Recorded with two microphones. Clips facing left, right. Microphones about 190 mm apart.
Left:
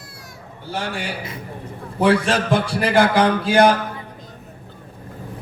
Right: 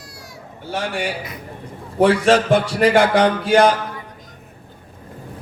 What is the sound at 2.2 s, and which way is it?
A man's voice, 60° right (ahead or behind).